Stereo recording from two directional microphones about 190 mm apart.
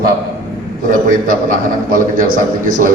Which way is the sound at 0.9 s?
45° right (ahead or behind).